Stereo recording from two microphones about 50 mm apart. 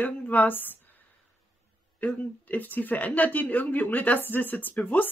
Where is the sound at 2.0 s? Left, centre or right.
Left.